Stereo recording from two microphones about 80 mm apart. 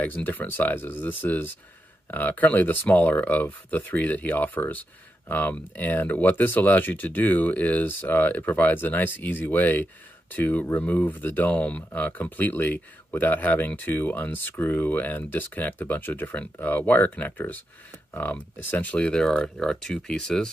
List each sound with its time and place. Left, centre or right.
0.0 s speech: left